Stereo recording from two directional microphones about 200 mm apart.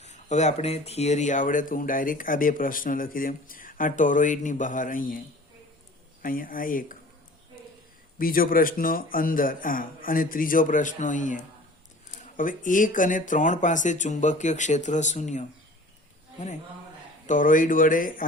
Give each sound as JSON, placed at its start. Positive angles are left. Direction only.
{"t": 0.0, "sound": "speech", "side_deg": 35}
{"t": 6.2, "sound": "a man's voice", "side_deg": 45}
{"t": 8.2, "sound": "a man's voice", "side_deg": 45}
{"t": 17.2, "sound": "a man's voice", "side_deg": 40}